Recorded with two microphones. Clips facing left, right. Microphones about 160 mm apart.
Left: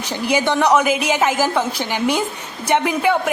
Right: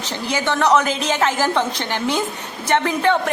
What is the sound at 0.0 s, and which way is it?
A woman's voice, 10° left (ahead or behind).